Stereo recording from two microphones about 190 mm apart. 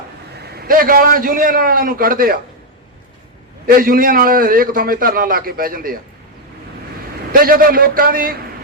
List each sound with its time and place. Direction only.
0.3 s a man's voice: 55° right (ahead or behind)
3.7 s a man's voice: 50° right (ahead or behind)
7.3 s a man's voice: 50° right (ahead or behind)